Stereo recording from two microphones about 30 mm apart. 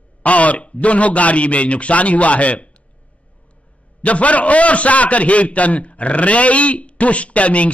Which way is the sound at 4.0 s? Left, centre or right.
Left.